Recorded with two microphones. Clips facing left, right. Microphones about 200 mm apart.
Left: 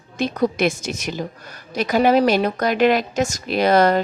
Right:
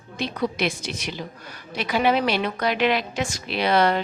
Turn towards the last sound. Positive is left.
turn(degrees=45)  # may be behind; listen again after turning